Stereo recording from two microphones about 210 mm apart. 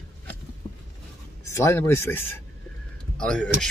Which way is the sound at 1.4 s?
15° left (ahead or behind).